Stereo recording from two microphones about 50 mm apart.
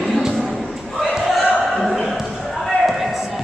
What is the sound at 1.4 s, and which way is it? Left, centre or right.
Basketball bounce, centre.